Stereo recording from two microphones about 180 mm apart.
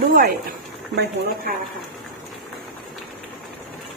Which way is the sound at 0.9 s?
65° right (ahead or behind).